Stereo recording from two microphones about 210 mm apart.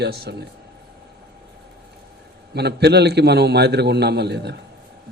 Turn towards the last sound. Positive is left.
turn(degrees=-55)  # may be behind; listen again after turning